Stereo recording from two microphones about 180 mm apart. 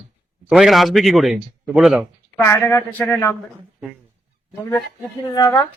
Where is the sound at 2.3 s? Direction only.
15° left (ahead or behind).